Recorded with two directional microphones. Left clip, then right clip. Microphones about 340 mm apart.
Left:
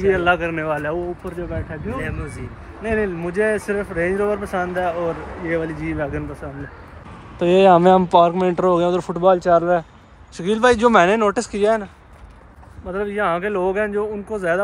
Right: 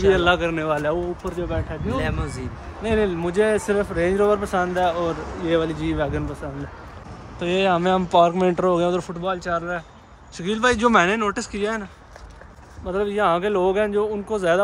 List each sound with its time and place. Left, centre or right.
0.0 s speech: centre
7.3 s speech: centre